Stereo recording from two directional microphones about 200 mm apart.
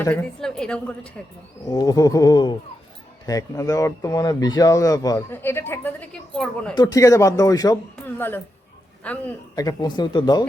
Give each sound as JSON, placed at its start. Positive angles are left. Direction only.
{"t": 0.0, "sound": "a woman's voice", "side_deg": 10}
{"t": 1.7, "sound": "speech", "side_deg": 20}
{"t": 6.7, "sound": "speech", "side_deg": 15}